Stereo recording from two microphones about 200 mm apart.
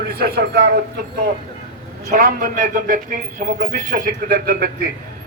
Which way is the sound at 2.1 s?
45° right (ahead or behind).